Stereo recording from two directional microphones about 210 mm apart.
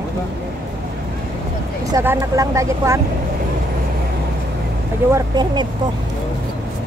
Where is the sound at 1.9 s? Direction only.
15° right (ahead or behind).